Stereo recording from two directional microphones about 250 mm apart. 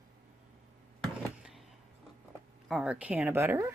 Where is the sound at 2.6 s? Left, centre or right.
Centre.